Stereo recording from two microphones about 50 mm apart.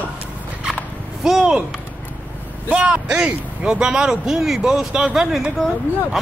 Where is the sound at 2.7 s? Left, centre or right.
Right.